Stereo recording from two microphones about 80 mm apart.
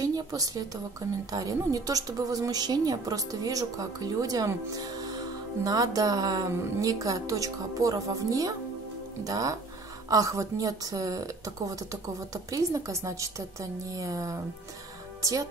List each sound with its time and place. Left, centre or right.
0.0 s a woman's voice: right